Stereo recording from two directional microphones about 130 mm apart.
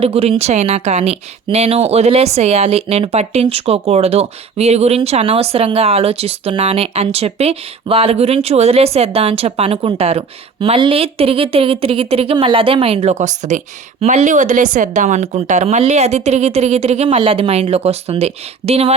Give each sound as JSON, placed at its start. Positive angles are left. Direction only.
{"t": 0.0, "sound": "a woman's voice", "side_deg": -45}